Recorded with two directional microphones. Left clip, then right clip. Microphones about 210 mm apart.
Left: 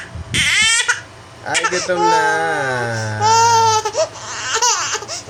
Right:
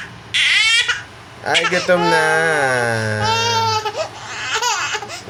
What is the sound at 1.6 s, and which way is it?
Speech, 20° left (ahead or behind).